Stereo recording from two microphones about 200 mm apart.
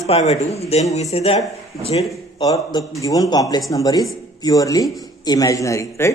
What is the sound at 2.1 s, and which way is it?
A man's voice, 15° left (ahead or behind).